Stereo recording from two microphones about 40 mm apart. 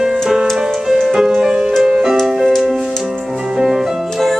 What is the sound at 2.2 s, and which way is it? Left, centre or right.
Music, centre.